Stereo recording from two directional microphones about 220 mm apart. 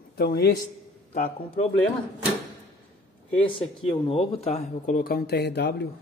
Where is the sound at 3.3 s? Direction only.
25° left (ahead or behind).